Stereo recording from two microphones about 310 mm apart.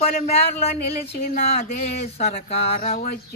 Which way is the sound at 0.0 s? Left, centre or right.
Centre.